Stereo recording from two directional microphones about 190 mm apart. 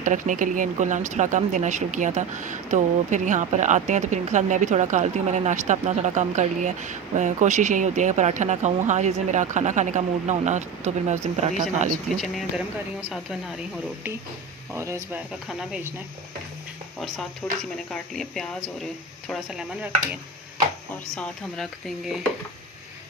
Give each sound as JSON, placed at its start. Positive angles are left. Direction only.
{"t": 0.0, "sound": "speech", "side_deg": -45}
{"t": 12.1, "sound": "speech", "side_deg": 0}
{"t": 14.7, "sound": "speech", "side_deg": -15}
{"t": 17.0, "sound": "speech", "side_deg": 0}
{"t": 21.2, "sound": "speech", "side_deg": 0}